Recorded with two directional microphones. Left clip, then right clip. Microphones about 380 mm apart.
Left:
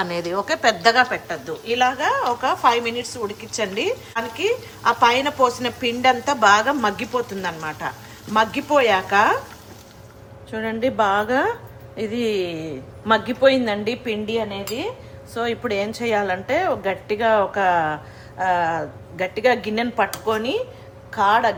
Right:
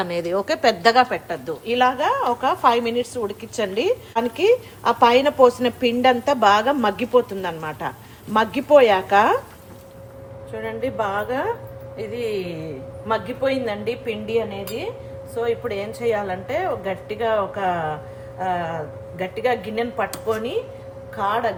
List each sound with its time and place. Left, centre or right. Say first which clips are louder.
0.0 s speech: right 1 dB; centre
10.5 s a woman's voice: left 3 dB; left